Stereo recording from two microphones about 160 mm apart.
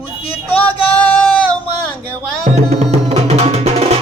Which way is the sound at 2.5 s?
45° right (ahead or behind).